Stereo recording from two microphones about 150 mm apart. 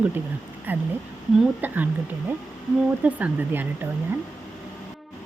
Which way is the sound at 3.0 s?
10° right (ahead or behind).